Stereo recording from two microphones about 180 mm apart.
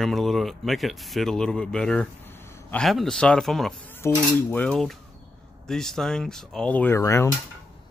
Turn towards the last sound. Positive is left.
turn(degrees=15)  # may be behind; listen again after turning